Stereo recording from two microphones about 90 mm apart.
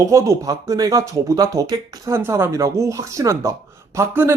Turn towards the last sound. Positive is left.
turn(degrees=-30)  # may be behind; listen again after turning